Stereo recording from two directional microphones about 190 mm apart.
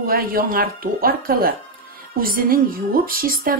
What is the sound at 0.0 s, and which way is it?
A woman's voice, 50° right (ahead or behind).